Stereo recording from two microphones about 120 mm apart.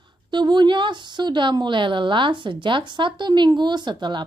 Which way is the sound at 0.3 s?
40° right (ahead or behind).